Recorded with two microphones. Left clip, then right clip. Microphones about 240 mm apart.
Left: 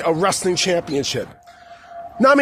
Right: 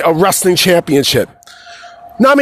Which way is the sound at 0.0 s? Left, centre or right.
Right.